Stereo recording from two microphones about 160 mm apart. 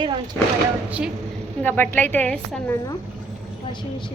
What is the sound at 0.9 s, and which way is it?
Speech, 10° right (ahead or behind).